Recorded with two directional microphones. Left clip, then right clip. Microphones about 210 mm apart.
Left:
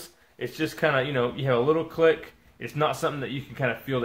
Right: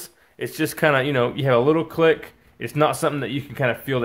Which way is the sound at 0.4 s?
45° right (ahead or behind).